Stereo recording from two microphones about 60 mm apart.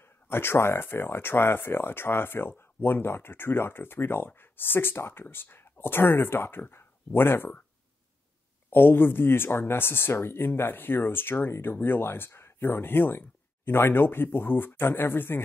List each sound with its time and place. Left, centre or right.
0.0 s speech: left
8.6 s speech: left